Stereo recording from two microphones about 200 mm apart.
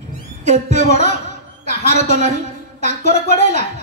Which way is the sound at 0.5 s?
35° right (ahead or behind).